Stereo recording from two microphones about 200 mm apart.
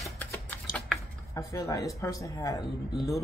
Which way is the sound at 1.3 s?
15° left (ahead or behind).